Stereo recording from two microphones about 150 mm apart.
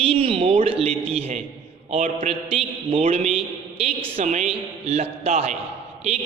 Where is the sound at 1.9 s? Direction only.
40° right (ahead or behind).